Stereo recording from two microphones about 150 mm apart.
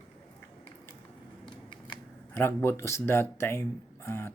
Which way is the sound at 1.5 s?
35° left (ahead or behind).